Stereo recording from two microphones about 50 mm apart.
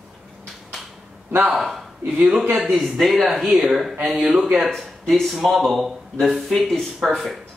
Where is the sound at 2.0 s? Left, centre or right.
Right.